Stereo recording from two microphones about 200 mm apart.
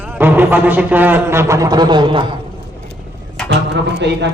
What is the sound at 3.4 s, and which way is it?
Speech, 60° right (ahead or behind).